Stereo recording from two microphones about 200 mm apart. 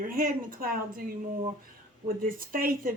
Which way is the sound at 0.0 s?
45° right (ahead or behind).